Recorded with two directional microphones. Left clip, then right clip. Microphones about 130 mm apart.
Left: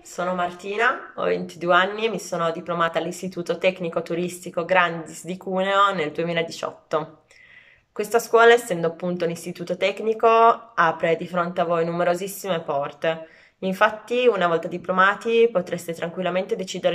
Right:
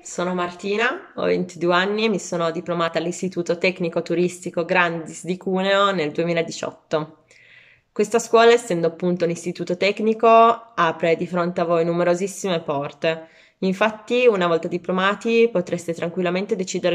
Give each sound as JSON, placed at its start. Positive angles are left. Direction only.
{"t": 0.1, "sound": "speech", "side_deg": -25}